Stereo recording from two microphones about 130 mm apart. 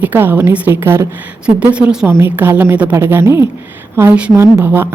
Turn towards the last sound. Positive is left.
turn(degrees=-15)  # may be behind; listen again after turning